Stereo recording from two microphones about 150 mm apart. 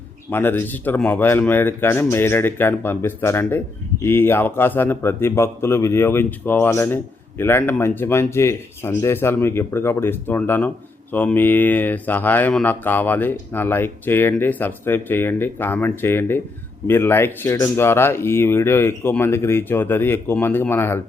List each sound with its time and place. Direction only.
0.3 s speech: 15° left (ahead or behind)